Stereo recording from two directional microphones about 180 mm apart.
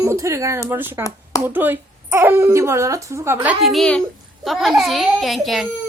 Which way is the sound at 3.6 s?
Centre (ahead or behind).